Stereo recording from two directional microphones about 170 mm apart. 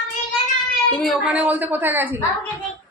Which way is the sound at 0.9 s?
Centre (ahead or behind).